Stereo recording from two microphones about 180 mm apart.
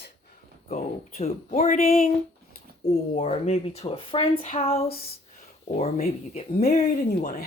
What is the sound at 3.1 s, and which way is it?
A woman's voice, 40° left (ahead or behind).